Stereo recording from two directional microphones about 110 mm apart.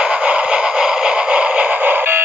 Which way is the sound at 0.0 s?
10° right (ahead or behind).